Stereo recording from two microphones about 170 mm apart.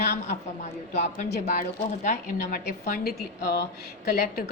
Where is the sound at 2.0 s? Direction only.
50° left (ahead or behind).